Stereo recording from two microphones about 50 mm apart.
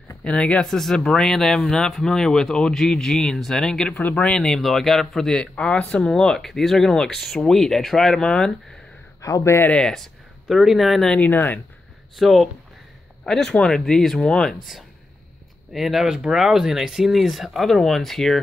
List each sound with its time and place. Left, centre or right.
0.2 s speech: left
0.7 s speech: centre
4.5 s speech: centre
5.4 s speech: left; by 8.1 s centre
8.1 s speech: centre
9.7 s speech: centre
10.5 s speech: centre
11.1 s speech: left
12.2 s speech: centre
15.7 s speech: centre